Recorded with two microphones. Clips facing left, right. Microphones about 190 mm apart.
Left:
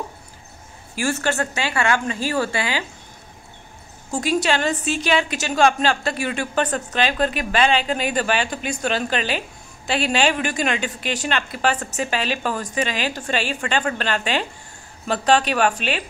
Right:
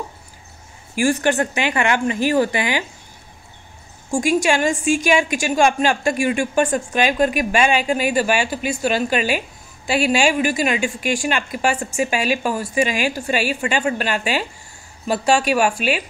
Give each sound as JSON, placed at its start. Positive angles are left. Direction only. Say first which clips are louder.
{"t": 0.9, "sound": "a woman's voice", "louder": "right 5 dB", "side_deg": -15}
{"t": 4.1, "sound": "a woman's voice", "louder": "right 3 dB", "side_deg": -10}